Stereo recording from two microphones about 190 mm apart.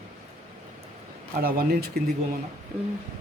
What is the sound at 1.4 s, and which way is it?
Speech, 55° right (ahead or behind).